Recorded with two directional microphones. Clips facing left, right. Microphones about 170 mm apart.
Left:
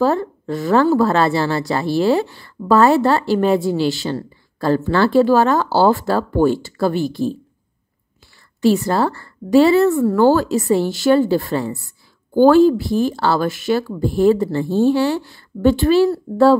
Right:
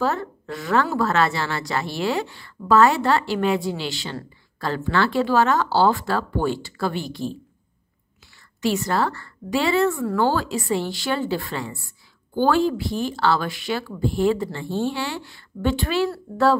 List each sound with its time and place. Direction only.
0.0 s a woman's voice: 30° left (ahead or behind)
8.5 s speech: 35° left (ahead or behind)